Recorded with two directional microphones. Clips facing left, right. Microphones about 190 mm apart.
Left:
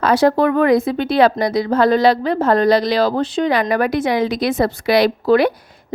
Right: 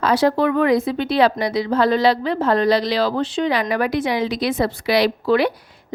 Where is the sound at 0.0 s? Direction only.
50° left (ahead or behind).